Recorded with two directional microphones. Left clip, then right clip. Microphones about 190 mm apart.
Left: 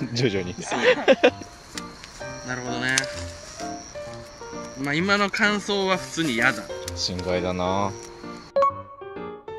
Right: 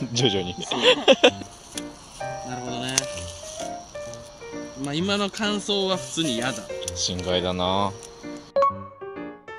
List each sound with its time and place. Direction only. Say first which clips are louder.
0.1 s speech: right 3 dB; 10° right (ahead or behind)
2.4 s speech: left 3 dB; 10° right (ahead or behind)
4.8 s speech: left 4 dB; 10° right (ahead or behind)
8.6 s music: even; centre (ahead or behind)